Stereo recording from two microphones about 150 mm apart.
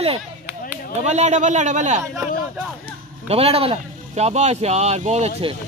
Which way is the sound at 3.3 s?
40° right (ahead or behind).